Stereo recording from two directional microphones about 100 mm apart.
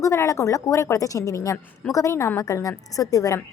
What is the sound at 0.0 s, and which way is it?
A woman's voice, 30° left (ahead or behind).